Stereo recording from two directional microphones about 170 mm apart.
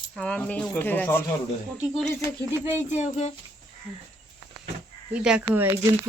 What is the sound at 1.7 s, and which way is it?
Speech, centre (ahead or behind).